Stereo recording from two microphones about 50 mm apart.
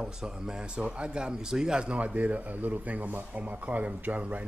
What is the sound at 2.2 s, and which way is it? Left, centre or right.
Speech, right.